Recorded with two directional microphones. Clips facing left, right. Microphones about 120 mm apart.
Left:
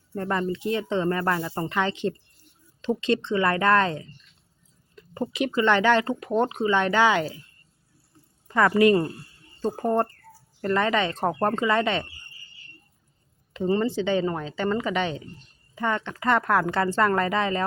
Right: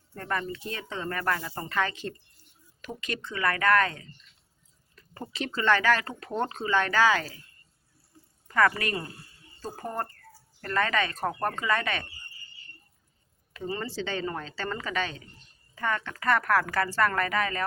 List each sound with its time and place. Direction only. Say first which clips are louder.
0.1 s speech: left 6 dB; 25° left (ahead or behind)
8.4 s speech: left 7 dB; 20° left (ahead or behind)
13.5 s speech: left 10 dB; 25° left (ahead or behind)